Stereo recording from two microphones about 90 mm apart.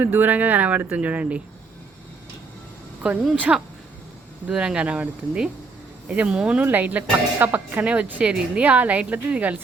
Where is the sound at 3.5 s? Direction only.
20° right (ahead or behind).